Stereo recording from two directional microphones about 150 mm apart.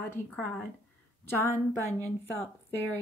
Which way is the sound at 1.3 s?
15° left (ahead or behind).